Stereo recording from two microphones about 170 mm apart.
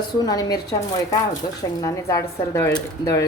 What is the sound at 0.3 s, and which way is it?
Speech, 20° left (ahead or behind).